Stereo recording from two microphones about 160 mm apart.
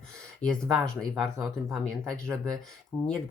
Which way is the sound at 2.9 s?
10° right (ahead or behind).